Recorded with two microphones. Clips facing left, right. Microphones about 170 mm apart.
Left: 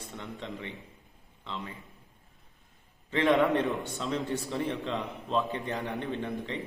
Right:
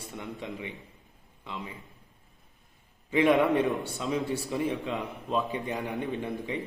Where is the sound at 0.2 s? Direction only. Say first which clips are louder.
Right 2 dB; 10° right (ahead or behind).